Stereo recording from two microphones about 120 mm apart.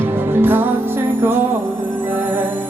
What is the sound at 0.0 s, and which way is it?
Music, 20° right (ahead or behind).